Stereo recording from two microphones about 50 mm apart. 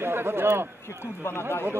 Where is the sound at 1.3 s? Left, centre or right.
Left.